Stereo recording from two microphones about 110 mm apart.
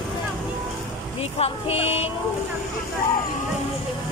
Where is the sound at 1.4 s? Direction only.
65° left (ahead or behind).